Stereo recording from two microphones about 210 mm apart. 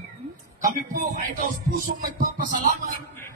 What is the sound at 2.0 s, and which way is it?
Speech, 40° right (ahead or behind).